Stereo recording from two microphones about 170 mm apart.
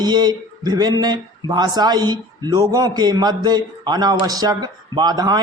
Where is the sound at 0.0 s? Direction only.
25° right (ahead or behind).